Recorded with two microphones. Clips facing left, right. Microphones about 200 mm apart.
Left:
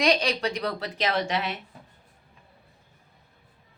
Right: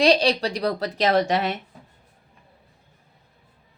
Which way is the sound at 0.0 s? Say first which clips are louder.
Right 5 dB; 35° right (ahead or behind).